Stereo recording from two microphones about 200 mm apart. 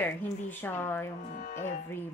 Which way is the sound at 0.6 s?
10° left (ahead or behind).